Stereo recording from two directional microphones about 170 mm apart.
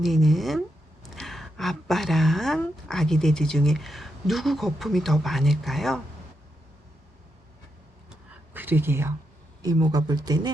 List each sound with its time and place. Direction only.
0.0 s speech: centre (ahead or behind)
8.1 s a sound: 10° right (ahead or behind)
9.6 s speech: 20° right (ahead or behind)